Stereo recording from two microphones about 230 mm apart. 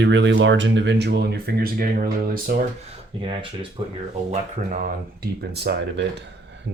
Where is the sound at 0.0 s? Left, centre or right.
Right.